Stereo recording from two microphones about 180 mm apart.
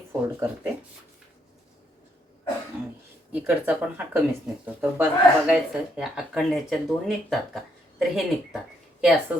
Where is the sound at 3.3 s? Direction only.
10° right (ahead or behind).